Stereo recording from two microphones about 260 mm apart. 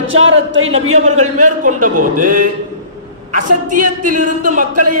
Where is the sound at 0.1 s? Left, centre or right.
Right.